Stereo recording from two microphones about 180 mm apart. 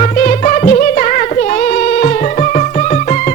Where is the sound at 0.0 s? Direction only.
40° left (ahead or behind).